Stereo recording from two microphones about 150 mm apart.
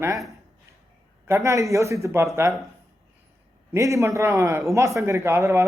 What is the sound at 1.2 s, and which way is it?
A man's voice, 20° right (ahead or behind).